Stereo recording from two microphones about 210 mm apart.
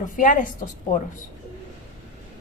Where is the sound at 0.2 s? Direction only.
40° left (ahead or behind).